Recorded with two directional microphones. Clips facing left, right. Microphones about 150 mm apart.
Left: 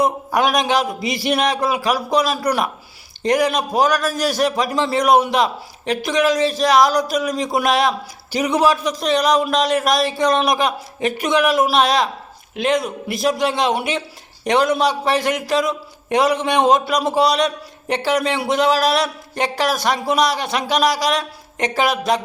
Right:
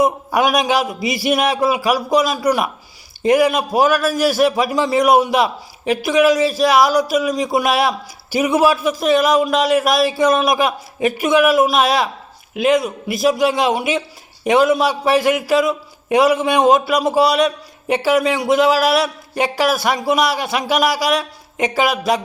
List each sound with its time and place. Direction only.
0.0 s a man's voice: centre (ahead or behind)